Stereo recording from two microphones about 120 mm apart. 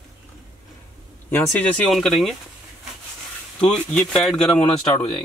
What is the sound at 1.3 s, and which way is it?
Speech, 15° left (ahead or behind).